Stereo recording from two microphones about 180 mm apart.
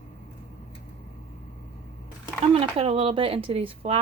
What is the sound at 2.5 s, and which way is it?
Speech, 35° right (ahead or behind).